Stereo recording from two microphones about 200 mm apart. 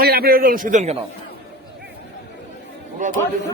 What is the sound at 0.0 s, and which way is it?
Speech, 50° right (ahead or behind).